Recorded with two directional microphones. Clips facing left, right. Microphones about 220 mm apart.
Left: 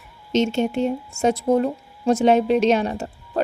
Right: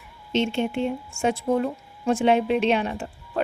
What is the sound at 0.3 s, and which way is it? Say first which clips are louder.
A woman's voice: left 4 dB; 40° left (ahead or behind).